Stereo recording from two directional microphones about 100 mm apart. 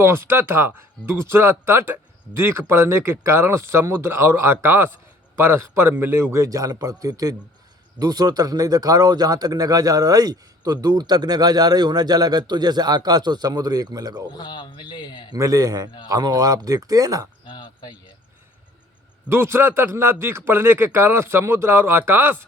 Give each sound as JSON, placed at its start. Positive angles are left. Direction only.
{"t": 0.0, "sound": "a man's voice", "side_deg": -25}
{"t": 14.3, "sound": "a man's voice", "side_deg": 50}
{"t": 15.4, "sound": "a man's voice", "side_deg": -35}
{"t": 17.4, "sound": "a sound", "side_deg": 50}
{"t": 19.3, "sound": "speech", "side_deg": -25}